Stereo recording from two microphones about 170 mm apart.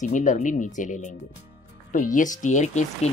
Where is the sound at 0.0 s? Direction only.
45° left (ahead or behind).